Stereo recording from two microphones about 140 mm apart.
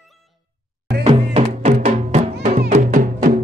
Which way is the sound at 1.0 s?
50° right (ahead or behind).